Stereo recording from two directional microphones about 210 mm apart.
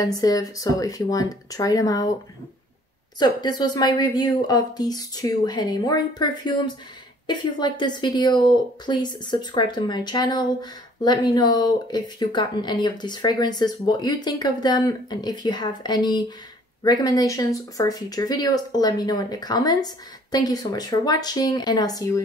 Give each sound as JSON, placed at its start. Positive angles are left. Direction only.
{"t": 0.0, "sound": "speech", "side_deg": 15}
{"t": 3.2, "sound": "speech", "side_deg": 20}